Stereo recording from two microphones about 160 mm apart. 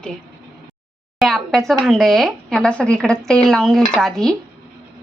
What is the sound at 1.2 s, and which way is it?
Speech, centre (ahead or behind).